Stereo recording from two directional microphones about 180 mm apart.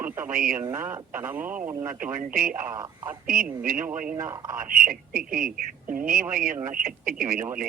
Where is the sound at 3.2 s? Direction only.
50° right (ahead or behind).